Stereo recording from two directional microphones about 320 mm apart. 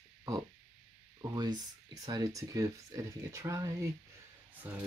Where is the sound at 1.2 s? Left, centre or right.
Centre.